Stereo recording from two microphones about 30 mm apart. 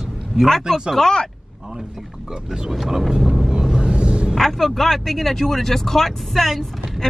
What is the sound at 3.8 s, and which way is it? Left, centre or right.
Vehicle, right.